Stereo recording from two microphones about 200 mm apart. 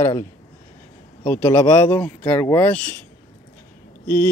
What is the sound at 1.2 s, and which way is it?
Speech, 10° left (ahead or behind).